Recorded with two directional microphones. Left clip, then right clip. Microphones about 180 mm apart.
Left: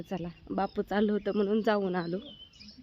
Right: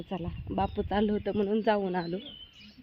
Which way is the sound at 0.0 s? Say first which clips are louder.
Even; centre (ahead or behind).